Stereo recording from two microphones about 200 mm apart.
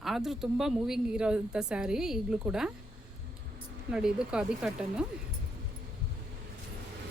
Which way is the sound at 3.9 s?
5° right (ahead or behind).